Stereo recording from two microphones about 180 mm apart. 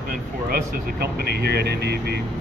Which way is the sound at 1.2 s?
65° right (ahead or behind).